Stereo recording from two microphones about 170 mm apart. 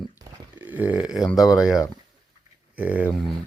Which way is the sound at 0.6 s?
10° right (ahead or behind).